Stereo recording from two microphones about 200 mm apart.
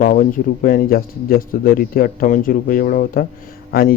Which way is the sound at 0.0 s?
45° left (ahead or behind).